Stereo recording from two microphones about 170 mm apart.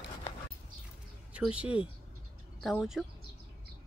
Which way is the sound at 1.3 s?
5° right (ahead or behind).